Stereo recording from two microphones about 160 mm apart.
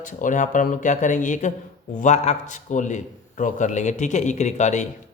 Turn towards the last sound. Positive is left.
turn(degrees=45)  # may be behind; listen again after turning